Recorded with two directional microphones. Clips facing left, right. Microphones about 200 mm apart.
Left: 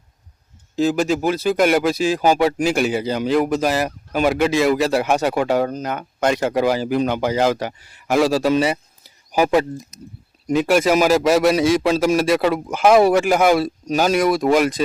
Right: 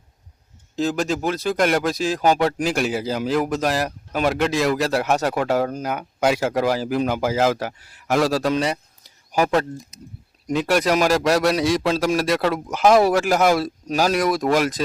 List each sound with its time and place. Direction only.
0.8 s speech: centre (ahead or behind)